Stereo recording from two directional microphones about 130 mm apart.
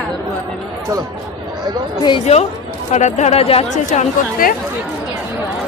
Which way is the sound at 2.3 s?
55° left (ahead or behind).